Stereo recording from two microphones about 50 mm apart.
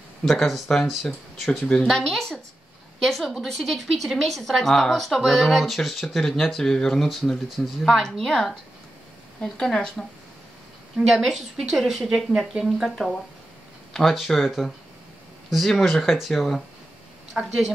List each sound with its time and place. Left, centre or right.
0.2 s speech: centre
11.0 s speech: centre
14.4 s speech: centre